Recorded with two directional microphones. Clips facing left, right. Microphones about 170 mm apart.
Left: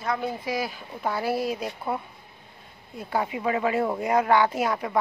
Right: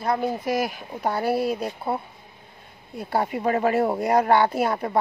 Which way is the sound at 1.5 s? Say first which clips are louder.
Right 3 dB; 30° right (ahead or behind).